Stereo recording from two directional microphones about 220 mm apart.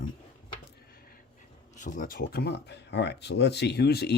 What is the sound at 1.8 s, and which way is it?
Speech, 35° left (ahead or behind).